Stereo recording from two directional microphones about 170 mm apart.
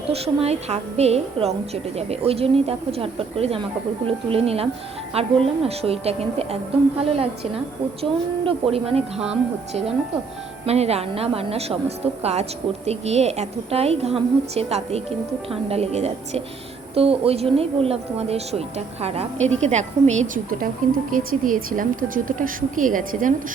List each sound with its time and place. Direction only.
0.1 s a woman's voice: 35° right (ahead or behind)
10.7 s a woman's voice: 40° right (ahead or behind)